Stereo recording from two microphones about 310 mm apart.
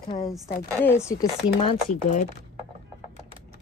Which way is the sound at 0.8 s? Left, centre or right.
Centre.